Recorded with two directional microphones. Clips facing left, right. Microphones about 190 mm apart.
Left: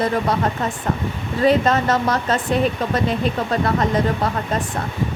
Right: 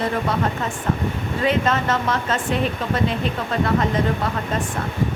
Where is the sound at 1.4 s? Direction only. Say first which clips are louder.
Left 5 dB; 40° left (ahead or behind).